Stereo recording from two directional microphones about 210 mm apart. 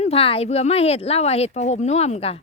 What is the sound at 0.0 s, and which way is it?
Speech, 25° left (ahead or behind).